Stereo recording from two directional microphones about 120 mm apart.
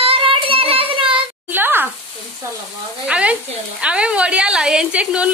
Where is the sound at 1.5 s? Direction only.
15° right (ahead or behind).